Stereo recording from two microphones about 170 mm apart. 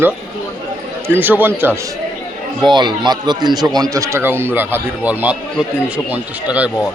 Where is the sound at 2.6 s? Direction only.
25° right (ahead or behind).